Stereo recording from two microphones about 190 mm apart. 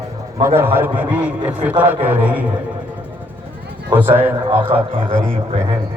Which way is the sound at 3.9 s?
10° right (ahead or behind).